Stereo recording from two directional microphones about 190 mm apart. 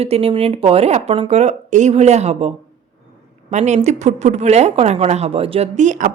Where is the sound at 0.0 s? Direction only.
30° right (ahead or behind).